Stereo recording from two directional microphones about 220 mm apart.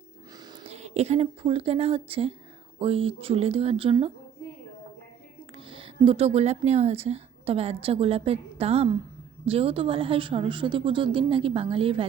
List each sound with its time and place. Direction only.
0.3 s a woman's voice: 20° right (ahead or behind)
5.5 s a woman's voice: 25° right (ahead or behind)